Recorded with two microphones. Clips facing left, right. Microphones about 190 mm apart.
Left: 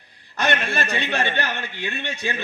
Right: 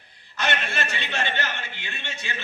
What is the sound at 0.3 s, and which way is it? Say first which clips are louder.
A man's voice: left 4 dB; 55° left (ahead or behind).